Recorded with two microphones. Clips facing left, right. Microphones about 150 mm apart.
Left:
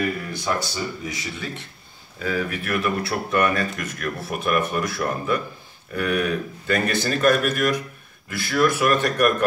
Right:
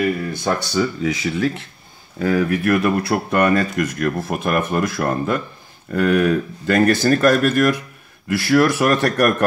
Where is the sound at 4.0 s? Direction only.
45° right (ahead or behind).